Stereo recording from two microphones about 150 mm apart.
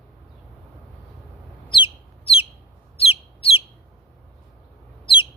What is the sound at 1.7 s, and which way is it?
Chicken, 35° left (ahead or behind).